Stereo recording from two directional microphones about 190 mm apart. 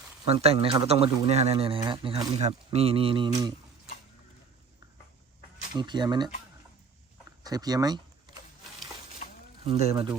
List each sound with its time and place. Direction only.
0.3 s speech: 30° right (ahead or behind)
5.7 s speech: 25° right (ahead or behind)
7.4 s speech: 20° right (ahead or behind)
9.2 s a sound: 40° left (ahead or behind)
9.6 s speech: 35° right (ahead or behind)